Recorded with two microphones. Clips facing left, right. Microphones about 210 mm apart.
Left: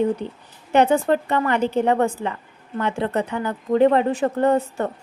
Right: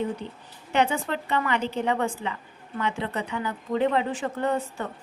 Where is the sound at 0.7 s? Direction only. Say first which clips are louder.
Left 8 dB; 50° left (ahead or behind).